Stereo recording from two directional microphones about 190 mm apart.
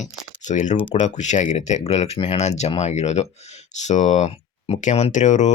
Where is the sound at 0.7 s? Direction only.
25° left (ahead or behind).